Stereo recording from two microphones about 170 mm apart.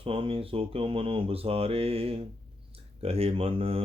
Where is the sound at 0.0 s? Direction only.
35° right (ahead or behind).